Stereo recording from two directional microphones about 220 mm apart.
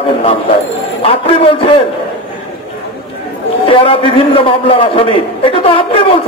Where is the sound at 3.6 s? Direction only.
25° left (ahead or behind).